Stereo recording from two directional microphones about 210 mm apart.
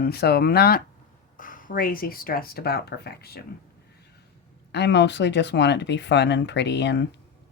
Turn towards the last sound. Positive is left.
turn(degrees=55)  # may be behind; listen again after turning